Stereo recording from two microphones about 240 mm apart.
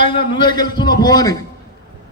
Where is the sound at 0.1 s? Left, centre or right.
Left.